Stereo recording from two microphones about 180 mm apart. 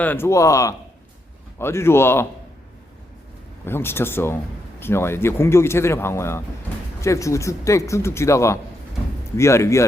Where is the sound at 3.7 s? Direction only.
15° left (ahead or behind).